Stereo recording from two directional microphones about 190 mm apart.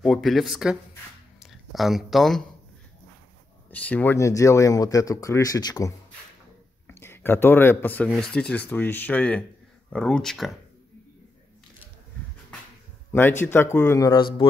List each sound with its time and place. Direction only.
0.0 s speech: centre (ahead or behind)
3.7 s speech: 10° left (ahead or behind)
13.4 s speech: 10° left (ahead or behind)